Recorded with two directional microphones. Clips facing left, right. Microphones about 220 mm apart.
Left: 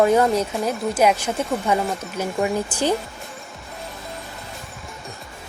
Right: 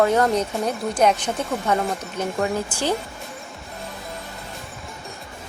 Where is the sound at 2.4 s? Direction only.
15° left (ahead or behind).